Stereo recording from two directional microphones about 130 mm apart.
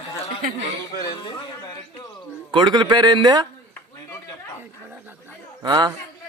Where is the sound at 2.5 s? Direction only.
35° right (ahead or behind).